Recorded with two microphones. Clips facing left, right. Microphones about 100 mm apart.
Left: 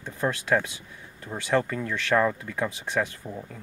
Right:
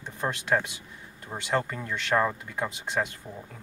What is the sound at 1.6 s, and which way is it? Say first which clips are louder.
Speech: left 4 dB; 10° right (ahead or behind).